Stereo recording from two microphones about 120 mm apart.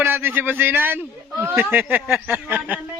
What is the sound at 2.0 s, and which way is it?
Speech, 5° right (ahead or behind).